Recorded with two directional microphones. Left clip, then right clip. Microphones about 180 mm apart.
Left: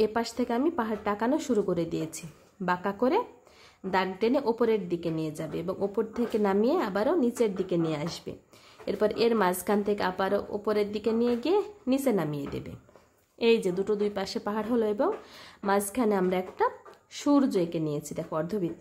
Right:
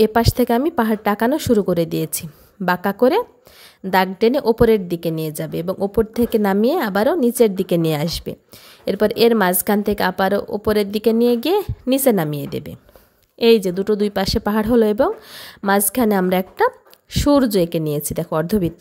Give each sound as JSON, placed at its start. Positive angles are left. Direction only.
{"t": 0.0, "sound": "a woman's voice", "side_deg": -40}